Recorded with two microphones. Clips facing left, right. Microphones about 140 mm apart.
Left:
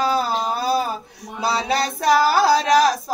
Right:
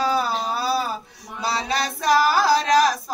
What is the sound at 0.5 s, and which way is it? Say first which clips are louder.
Speech: left 3 dB; 45° left (ahead or behind).